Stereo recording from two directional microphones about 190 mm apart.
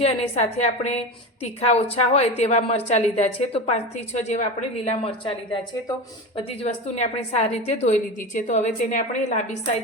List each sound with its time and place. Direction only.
0.0 s a woman's voice: 35° left (ahead or behind)